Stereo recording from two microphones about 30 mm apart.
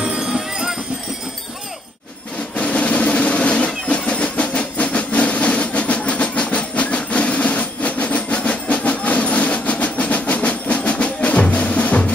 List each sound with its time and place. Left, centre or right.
0.2 s music: right
2.5 s drum roll: left
4.1 s train: left
7.1 s a sound: left
8.6 s train: left
11.4 s music: left